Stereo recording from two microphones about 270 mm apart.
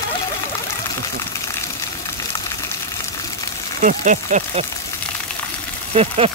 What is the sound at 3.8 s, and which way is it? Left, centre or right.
Speech, right.